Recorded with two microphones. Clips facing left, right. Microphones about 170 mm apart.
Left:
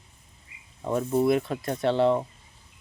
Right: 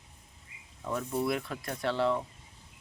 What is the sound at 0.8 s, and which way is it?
Speech, 25° left (ahead or behind).